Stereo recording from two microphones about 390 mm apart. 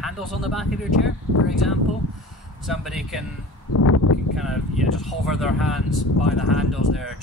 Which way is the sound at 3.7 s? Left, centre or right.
Left.